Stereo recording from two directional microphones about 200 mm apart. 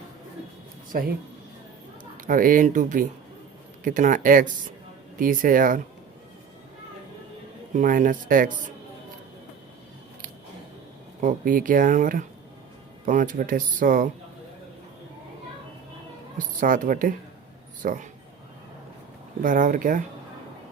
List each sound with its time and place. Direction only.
0.9 s speech: 50° right (ahead or behind)
2.1 s speech: 45° right (ahead or behind)
7.7 s speech: 40° right (ahead or behind)
11.2 s speech: 40° right (ahead or behind)
16.4 s speech: 40° right (ahead or behind)
19.4 s speech: 40° right (ahead or behind)